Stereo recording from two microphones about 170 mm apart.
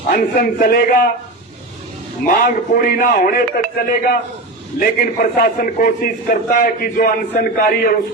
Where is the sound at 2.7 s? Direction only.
55° left (ahead or behind).